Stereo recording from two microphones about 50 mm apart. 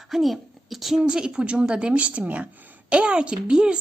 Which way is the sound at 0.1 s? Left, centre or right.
Centre.